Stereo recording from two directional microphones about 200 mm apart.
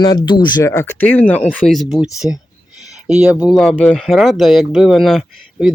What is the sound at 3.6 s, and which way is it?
Speech, 5° left (ahead or behind).